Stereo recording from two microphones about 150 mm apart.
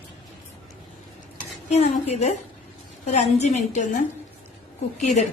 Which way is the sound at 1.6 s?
45° left (ahead or behind).